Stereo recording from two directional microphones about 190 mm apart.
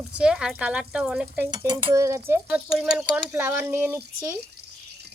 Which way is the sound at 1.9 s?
15° right (ahead or behind).